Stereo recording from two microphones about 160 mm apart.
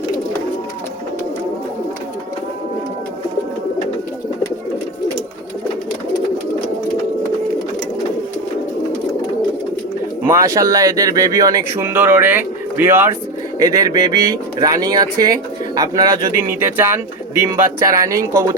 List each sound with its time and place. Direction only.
10.2 s speech: 20° right (ahead or behind)